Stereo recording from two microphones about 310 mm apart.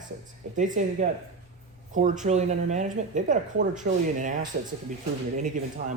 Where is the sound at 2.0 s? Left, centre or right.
Right.